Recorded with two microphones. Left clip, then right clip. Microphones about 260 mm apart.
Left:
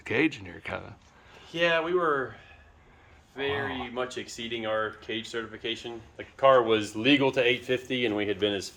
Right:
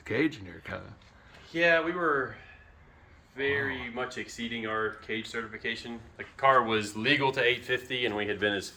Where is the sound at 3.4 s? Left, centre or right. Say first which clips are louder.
Right 1 dB; left.